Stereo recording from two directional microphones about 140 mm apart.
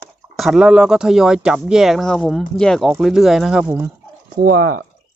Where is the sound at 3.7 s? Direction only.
15° right (ahead or behind).